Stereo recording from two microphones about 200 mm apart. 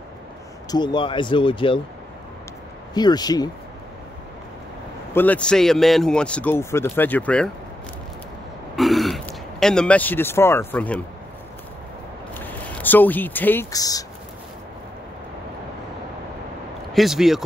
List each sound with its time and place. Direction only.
0.7 s speech: 20° left (ahead or behind)
2.9 s speech: 20° left (ahead or behind)
5.1 s a man's voice: 10° left (ahead or behind)
8.7 s speech: centre (ahead or behind)
12.4 s speech: 10° left (ahead or behind)
16.9 s a man's voice: centre (ahead or behind)